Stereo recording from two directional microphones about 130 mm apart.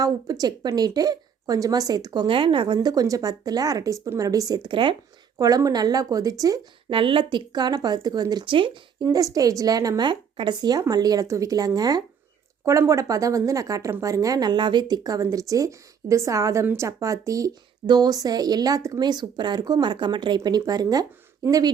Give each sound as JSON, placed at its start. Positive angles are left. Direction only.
{"t": 0.0, "sound": "a woman's voice", "side_deg": -30}
{"t": 2.2, "sound": "a woman's voice", "side_deg": -40}
{"t": 6.9, "sound": "speech", "side_deg": -40}
{"t": 9.0, "sound": "a woman's voice", "side_deg": -30}